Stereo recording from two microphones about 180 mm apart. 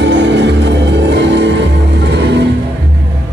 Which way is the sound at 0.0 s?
75° right (ahead or behind).